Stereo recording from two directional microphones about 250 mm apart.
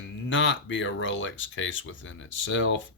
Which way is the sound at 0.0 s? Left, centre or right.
Left.